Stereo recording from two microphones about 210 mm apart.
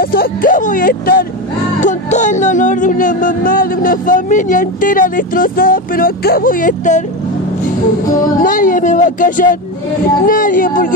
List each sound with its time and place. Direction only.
0.0 s speech: 45° left (ahead or behind)
8.4 s speech: 40° left (ahead or behind)